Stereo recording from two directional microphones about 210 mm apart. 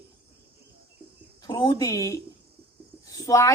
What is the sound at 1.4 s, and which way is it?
A woman's voice, 20° left (ahead or behind).